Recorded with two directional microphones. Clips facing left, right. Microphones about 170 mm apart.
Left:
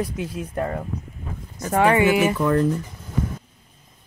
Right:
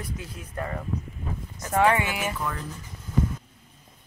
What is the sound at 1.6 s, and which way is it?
Speech, 65° left (ahead or behind).